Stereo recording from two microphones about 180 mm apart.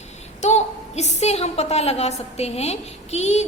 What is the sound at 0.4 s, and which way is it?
A woman's voice, 40° left (ahead or behind).